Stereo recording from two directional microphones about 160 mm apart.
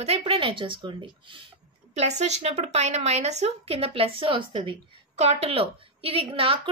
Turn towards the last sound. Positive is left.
turn(degrees=-35)  # may be behind; listen again after turning